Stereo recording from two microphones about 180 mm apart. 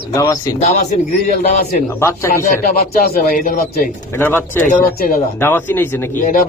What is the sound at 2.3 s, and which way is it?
A man's voice, 45° left (ahead or behind).